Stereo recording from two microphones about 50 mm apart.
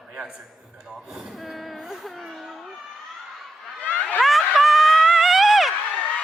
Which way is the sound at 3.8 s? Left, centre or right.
Left.